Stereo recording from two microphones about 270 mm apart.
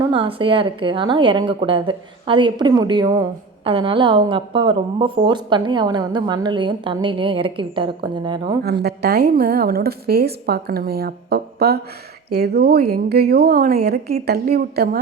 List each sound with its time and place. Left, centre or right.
0.0 s a woman's voice: centre
8.6 s a woman's voice: right